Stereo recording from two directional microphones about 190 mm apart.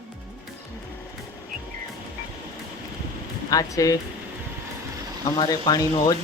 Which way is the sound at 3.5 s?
20° left (ahead or behind).